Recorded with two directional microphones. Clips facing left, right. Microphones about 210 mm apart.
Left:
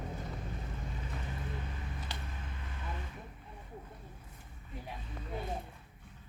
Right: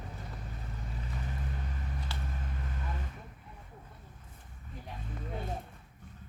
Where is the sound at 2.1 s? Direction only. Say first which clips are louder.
Right 2 dB; 15° left (ahead or behind).